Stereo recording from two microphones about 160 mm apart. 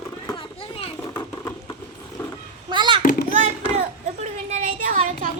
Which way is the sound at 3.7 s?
45° right (ahead or behind).